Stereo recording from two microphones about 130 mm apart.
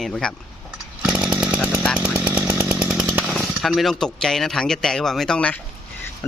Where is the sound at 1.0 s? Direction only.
5° right (ahead or behind).